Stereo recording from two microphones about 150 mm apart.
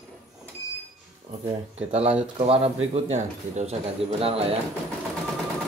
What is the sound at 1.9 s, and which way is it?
Speech, 45° right (ahead or behind).